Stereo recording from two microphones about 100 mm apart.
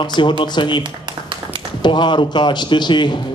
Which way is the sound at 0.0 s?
50° left (ahead or behind).